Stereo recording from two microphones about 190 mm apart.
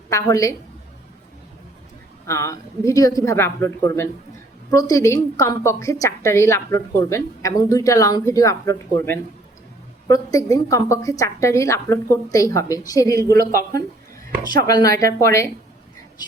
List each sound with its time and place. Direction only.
0.1 s a woman's voice: 15° left (ahead or behind)
2.2 s a woman's voice: 15° left (ahead or behind)
13.3 s a man's voice: 50° right (ahead or behind)
14.4 s a woman's voice: 20° left (ahead or behind)